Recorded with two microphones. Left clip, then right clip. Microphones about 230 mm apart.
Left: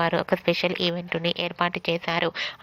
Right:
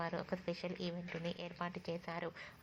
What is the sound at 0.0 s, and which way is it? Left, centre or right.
Speech, left.